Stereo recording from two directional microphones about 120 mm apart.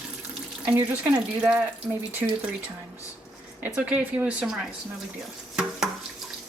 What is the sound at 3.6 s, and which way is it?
Speech, 10° right (ahead or behind).